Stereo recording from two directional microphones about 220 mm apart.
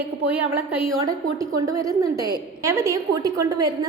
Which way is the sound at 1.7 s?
15° right (ahead or behind).